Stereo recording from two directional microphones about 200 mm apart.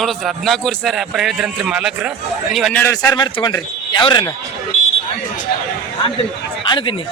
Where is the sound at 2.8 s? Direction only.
15° left (ahead or behind).